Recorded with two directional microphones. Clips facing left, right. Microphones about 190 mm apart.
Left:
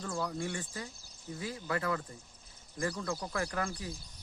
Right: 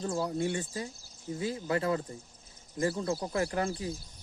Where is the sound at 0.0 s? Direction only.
30° right (ahead or behind).